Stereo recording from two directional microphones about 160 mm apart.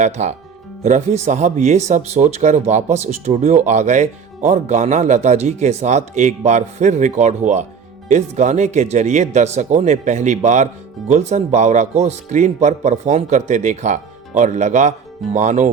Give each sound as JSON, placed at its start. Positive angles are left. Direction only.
{"t": 0.0, "sound": "speech", "side_deg": -45}